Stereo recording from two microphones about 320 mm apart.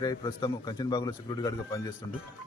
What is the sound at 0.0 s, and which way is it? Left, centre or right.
Speech, centre.